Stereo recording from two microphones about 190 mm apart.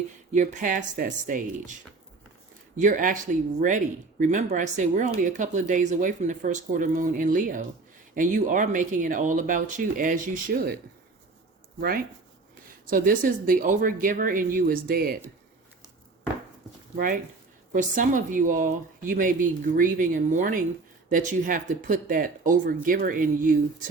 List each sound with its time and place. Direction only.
0.3 s speech: 40° right (ahead or behind)
2.7 s speech: 45° right (ahead or behind)
4.2 s speech: 40° right (ahead or behind)
11.8 s speech: 50° right (ahead or behind)
17.7 s speech: 45° right (ahead or behind)